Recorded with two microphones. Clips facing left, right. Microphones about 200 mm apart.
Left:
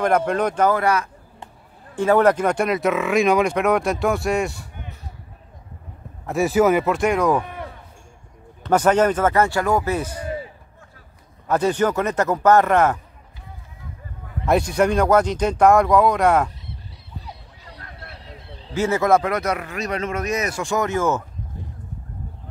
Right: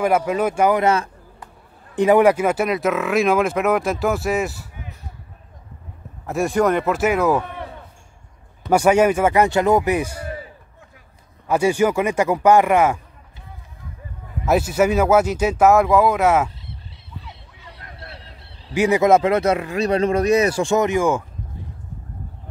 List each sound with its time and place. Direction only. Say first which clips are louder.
0.0 s speech: right 1 dB; 5° right (ahead or behind); by 1.1 s 25° right (ahead or behind)
2.0 s speech: right 2 dB; 15° right (ahead or behind)
6.2 s speech: left 1 dB; centre (ahead or behind)
8.6 s speech: right 2 dB; 10° right (ahead or behind)
11.4 s speech: right 2 dB; 10° right (ahead or behind)
14.4 s speech: right 1 dB; 5° right (ahead or behind)
18.7 s speech: right 3 dB; 15° right (ahead or behind)